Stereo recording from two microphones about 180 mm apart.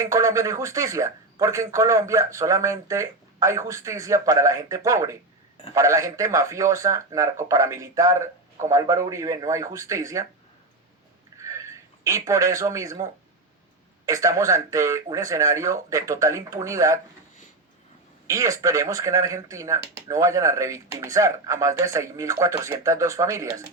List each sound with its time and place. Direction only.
0.0 s speech: 20° right (ahead or behind)
11.3 s a sound: 15° right (ahead or behind)
12.0 s speech: 15° right (ahead or behind)
18.3 s speech: 20° right (ahead or behind)